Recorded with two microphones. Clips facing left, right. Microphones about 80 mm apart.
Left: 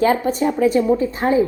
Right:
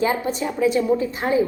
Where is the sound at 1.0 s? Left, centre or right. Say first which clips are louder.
Left 4 dB; left.